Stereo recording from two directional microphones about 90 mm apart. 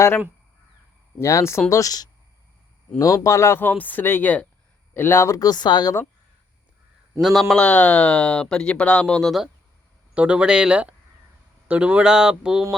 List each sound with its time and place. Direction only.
1.2 s speech: 30° left (ahead or behind)
1.7 s speech: 40° left (ahead or behind)
7.2 s speech: centre (ahead or behind)
10.2 s speech: 15° right (ahead or behind)